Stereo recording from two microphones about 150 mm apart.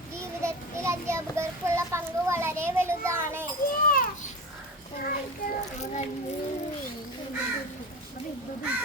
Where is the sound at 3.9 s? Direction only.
70° left (ahead or behind).